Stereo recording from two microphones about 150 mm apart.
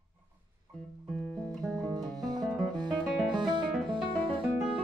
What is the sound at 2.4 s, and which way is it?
Music, centre (ahead or behind).